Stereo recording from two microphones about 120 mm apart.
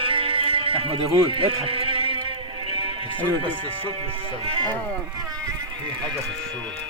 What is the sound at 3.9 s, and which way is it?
Speech, 55° right (ahead or behind).